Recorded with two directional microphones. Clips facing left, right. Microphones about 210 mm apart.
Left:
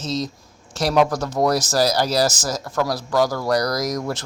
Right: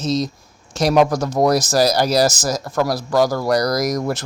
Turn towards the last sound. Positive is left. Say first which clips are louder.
# right 4 dB
turn(degrees=-10)  # may be behind; listen again after turning